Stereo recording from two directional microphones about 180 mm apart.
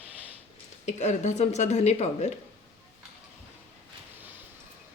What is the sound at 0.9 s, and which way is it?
Speech, 40° left (ahead or behind).